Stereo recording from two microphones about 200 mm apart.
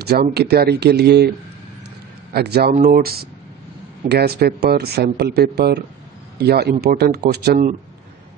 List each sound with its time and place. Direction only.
0.0 s speech: 55° right (ahead or behind)
2.3 s speech: 55° right (ahead or behind)
2.7 s speech: 40° right (ahead or behind)